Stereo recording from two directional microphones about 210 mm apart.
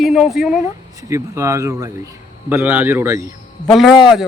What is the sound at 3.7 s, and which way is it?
Speech, centre (ahead or behind).